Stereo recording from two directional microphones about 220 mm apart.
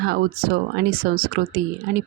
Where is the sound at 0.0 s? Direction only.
45° right (ahead or behind).